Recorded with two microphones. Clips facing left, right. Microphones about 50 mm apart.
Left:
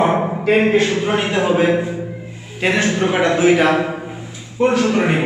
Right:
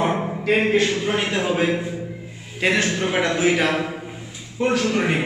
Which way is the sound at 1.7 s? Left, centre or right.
Left.